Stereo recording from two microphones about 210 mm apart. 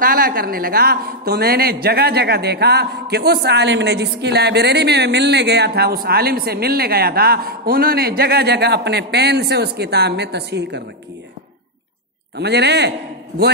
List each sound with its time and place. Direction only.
0.0 s a woman's voice: 45° right (ahead or behind)
12.4 s a woman's voice: 55° right (ahead or behind)